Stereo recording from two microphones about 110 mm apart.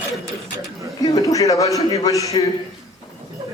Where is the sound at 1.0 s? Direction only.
30° left (ahead or behind).